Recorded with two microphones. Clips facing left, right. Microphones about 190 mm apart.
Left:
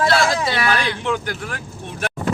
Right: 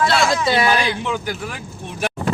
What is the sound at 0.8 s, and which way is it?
Speech, 10° right (ahead or behind).